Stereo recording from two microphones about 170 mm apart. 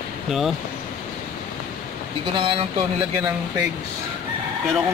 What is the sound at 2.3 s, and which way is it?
Speech, 30° right (ahead or behind).